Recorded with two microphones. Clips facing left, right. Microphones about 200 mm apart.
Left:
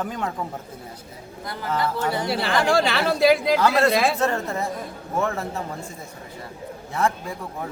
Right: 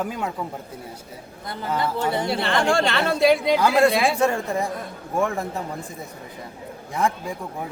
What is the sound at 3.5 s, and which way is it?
Speech, 15° right (ahead or behind).